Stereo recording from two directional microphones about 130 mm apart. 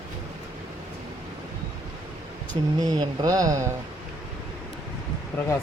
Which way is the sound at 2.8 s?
35° right (ahead or behind).